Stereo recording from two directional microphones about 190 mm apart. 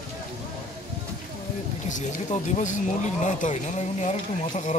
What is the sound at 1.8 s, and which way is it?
Speech, 40° left (ahead or behind).